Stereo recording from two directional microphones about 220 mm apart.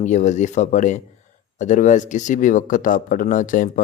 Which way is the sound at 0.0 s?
35° left (ahead or behind).